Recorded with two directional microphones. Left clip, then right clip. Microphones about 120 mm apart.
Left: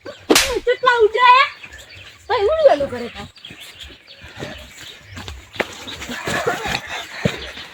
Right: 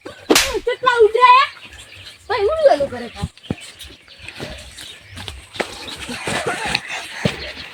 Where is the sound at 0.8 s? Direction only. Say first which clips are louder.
Right 2 dB; 20° left (ahead or behind).